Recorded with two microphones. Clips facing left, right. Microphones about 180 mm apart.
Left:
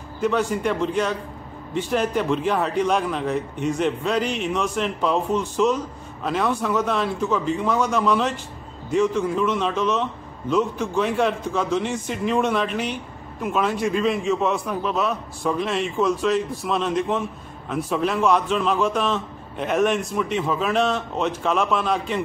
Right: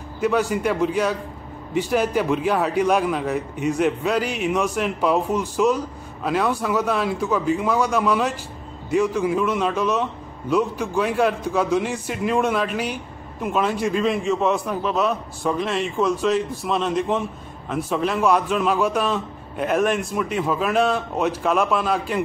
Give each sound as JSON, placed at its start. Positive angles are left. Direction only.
{"t": 0.2, "sound": "a man's voice", "side_deg": -5}